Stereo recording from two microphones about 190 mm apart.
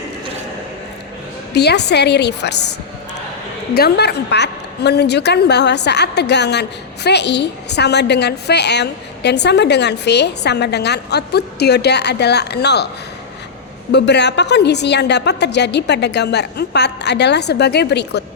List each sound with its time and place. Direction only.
1.5 s a woman's voice: 60° left (ahead or behind)
3.8 s a woman's voice: 55° left (ahead or behind)
13.9 s a woman's voice: 65° left (ahead or behind)